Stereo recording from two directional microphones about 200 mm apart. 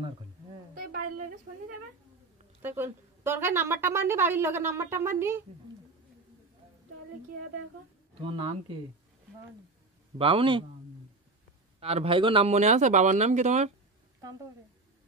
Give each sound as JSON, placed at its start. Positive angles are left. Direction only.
{"t": 2.6, "sound": "a woman's voice", "side_deg": -10}
{"t": 8.2, "sound": "a man's voice", "side_deg": -25}
{"t": 10.1, "sound": "a man's voice", "side_deg": -30}
{"t": 11.8, "sound": "speech", "side_deg": -30}